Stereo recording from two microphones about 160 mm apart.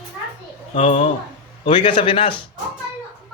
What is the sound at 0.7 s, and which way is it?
Speech, 45° left (ahead or behind).